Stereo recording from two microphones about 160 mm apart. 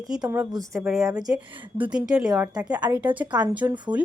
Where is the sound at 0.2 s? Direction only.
20° right (ahead or behind).